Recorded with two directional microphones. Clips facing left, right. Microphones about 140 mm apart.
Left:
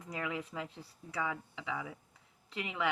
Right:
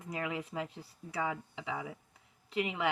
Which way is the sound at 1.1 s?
25° right (ahead or behind).